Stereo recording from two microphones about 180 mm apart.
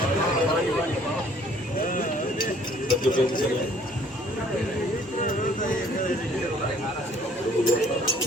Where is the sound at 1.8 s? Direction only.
45° left (ahead or behind).